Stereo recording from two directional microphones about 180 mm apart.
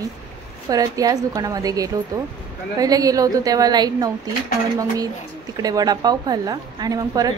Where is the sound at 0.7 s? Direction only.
20° right (ahead or behind).